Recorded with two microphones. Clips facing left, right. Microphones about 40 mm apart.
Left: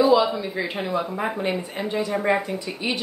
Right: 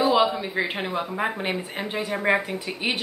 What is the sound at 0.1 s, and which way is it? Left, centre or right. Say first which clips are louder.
A woman's voice: left 2 dB; right.